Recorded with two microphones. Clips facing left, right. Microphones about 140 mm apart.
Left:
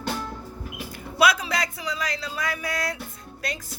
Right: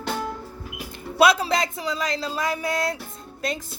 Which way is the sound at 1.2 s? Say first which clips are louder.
Right 4 dB; 30° right (ahead or behind).